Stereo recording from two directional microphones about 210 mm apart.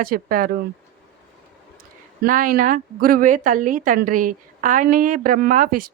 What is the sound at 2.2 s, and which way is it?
A woman's voice, 40° right (ahead or behind).